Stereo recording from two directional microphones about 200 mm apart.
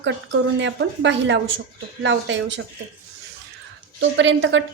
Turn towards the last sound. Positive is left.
turn(degrees=-70)  # may be behind; listen again after turning